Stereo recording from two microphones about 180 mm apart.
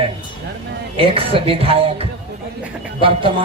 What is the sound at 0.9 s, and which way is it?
A man's voice, 30° right (ahead or behind).